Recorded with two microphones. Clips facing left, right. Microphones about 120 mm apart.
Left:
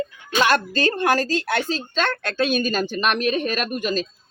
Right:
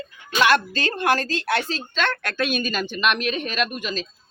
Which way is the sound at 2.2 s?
25° left (ahead or behind).